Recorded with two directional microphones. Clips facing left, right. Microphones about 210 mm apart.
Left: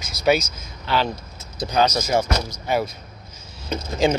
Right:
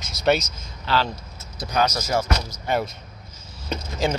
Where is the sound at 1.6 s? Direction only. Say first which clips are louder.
Left 3 dB; 20° left (ahead or behind).